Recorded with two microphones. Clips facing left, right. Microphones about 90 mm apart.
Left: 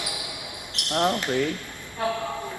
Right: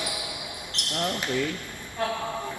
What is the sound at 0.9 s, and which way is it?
Speech, 75° left (ahead or behind).